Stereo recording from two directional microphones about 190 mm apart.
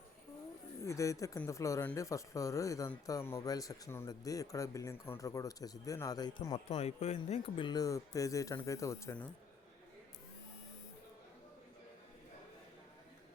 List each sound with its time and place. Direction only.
0.8 s speech: 15° left (ahead or behind)
6.7 s speech: 35° left (ahead or behind); by 9.3 s 10° left (ahead or behind)